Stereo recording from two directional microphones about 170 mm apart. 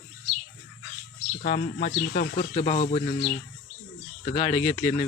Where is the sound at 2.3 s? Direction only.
40° left (ahead or behind).